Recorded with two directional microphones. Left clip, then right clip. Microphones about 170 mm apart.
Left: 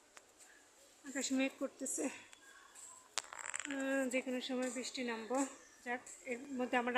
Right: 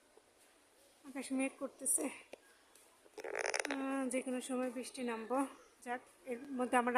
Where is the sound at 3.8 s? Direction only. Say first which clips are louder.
Left 2 dB; 20° right (ahead or behind).